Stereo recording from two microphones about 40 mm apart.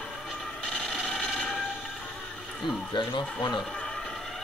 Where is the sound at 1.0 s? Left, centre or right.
Centre.